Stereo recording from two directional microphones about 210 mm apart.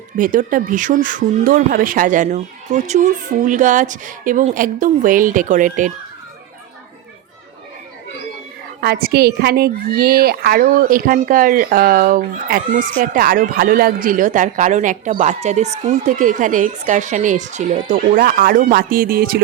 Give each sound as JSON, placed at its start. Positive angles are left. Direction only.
{"t": 0.2, "sound": "a woman's voice", "side_deg": -40}
{"t": 8.8, "sound": "a woman's voice", "side_deg": -50}